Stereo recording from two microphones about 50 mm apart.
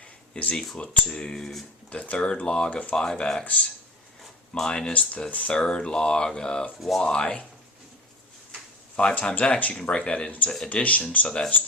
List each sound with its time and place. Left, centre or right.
0.0 s a sound: left
0.5 s speech: centre
0.8 s speech: left
1.4 s speech: centre
1.9 s speech: left
3.4 s speech: left
4.2 s speech: centre; by 5.5 s left
5.5 s speech: centre
6.7 s speech: centre
7.0 s speech: centre
9.0 s speech: left
11.3 s speech: centre